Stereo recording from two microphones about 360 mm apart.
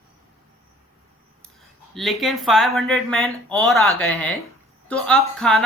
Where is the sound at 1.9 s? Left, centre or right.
Centre.